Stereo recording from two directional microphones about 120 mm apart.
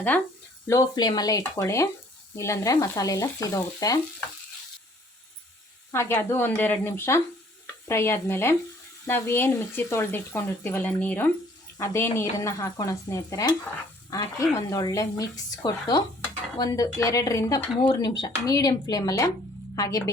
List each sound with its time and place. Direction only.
0.7 s speech: 30° left (ahead or behind)
5.9 s speech: 20° left (ahead or behind)
12.1 s speech: 25° left (ahead or behind)
17.8 s speech: 40° left (ahead or behind)